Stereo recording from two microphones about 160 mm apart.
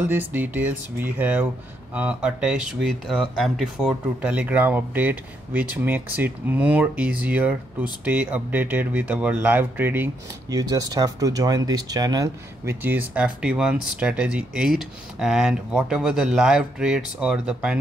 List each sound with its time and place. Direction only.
0.1 s speech: 10° right (ahead or behind)
10.5 s speech: 25° right (ahead or behind)
12.8 s speech: 10° right (ahead or behind)